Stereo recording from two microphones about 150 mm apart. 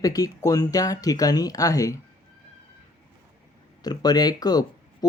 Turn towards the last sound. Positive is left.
turn(degrees=25)  # may be behind; listen again after turning